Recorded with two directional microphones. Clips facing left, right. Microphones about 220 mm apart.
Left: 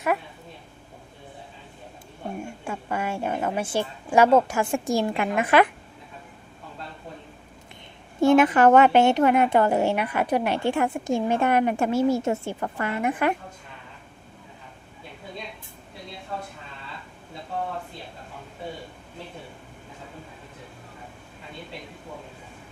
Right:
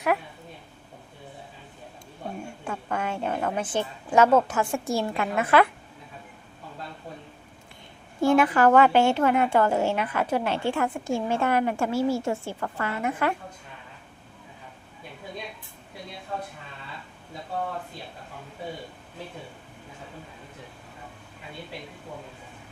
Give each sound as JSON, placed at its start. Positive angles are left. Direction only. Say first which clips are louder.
{"t": 2.4, "sound": "a woman's voice", "louder": "left 1 dB", "side_deg": 10}
{"t": 8.2, "sound": "a woman's voice", "louder": "left 3 dB", "side_deg": 20}